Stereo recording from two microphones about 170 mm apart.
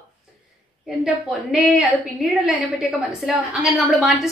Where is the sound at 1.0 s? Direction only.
Centre (ahead or behind).